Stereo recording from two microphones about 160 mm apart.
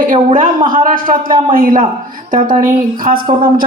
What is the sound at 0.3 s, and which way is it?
A woman's voice, 55° right (ahead or behind).